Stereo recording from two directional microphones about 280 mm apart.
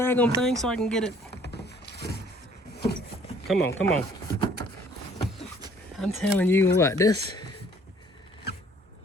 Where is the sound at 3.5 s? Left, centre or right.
Centre.